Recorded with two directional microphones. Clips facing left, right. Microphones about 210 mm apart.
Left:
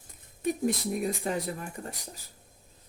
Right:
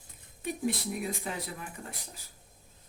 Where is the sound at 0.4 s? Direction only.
45° left (ahead or behind).